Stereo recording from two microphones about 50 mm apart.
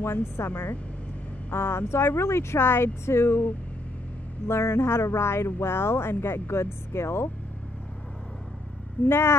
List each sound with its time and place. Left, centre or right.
0.0 s a woman's voice: left
4.5 s speech: left
9.0 s speech: left